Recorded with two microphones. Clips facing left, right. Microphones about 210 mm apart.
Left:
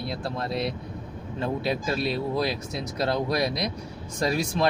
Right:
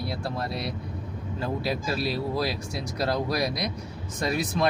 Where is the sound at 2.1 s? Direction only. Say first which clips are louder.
Left 1 dB; 25° left (ahead or behind).